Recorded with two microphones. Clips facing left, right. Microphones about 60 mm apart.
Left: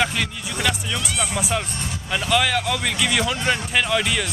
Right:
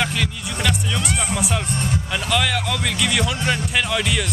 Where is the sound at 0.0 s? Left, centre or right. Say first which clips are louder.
Even; centre.